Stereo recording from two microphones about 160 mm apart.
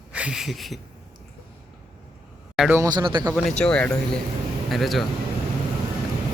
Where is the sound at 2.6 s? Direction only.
10° right (ahead or behind).